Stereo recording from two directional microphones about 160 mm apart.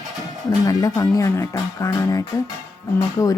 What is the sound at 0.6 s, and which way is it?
Speech, 25° left (ahead or behind).